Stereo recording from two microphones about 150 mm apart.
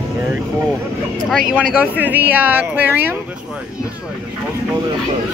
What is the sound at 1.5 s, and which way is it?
Speech, 5° right (ahead or behind).